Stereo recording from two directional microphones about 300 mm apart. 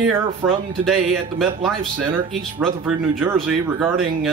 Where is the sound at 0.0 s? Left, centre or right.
Centre.